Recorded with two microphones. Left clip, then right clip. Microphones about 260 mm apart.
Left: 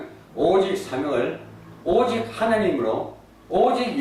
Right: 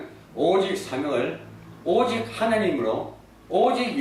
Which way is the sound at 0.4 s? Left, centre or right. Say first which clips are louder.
Left 2 dB; centre.